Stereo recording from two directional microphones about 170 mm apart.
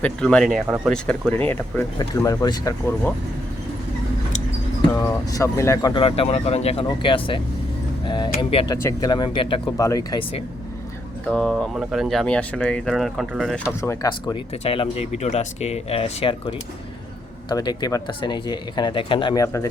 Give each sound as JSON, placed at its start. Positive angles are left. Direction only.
{"t": 0.0, "sound": "speech", "side_deg": 5}
{"t": 1.3, "sound": "speech", "side_deg": 10}
{"t": 4.9, "sound": "speech", "side_deg": 20}
{"t": 9.7, "sound": "speech", "side_deg": 20}
{"t": 11.3, "sound": "speech", "side_deg": 5}
{"t": 13.8, "sound": "speech", "side_deg": 20}
{"t": 14.6, "sound": "speech", "side_deg": 35}